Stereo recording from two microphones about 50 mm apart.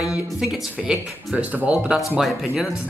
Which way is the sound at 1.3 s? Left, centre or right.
Right.